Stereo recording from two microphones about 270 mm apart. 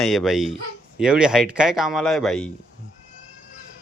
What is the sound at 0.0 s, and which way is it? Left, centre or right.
Speech, centre.